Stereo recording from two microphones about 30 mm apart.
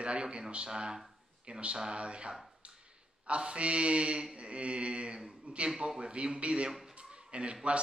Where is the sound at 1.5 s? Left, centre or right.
Right.